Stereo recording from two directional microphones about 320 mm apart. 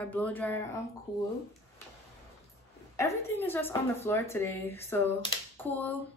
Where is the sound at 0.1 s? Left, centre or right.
Centre.